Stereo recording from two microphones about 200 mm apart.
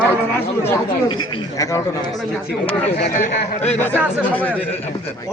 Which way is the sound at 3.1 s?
40° left (ahead or behind).